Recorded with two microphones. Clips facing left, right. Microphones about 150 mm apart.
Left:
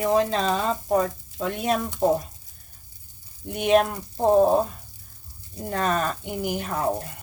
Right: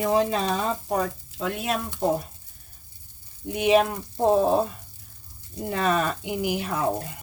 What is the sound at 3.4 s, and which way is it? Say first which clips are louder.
Speech: even; 5° right (ahead or behind).